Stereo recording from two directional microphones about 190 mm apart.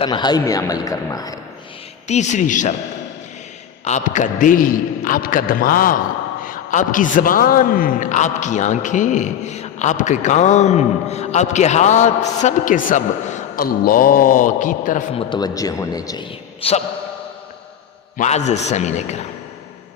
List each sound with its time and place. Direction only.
0.0 s a man's voice: 25° left (ahead or behind)
2.0 s a man's voice: 35° left (ahead or behind)
3.8 s a man's voice: 40° left (ahead or behind)
15.1 s a man's voice: 25° left (ahead or behind)
18.2 s a man's voice: 35° left (ahead or behind)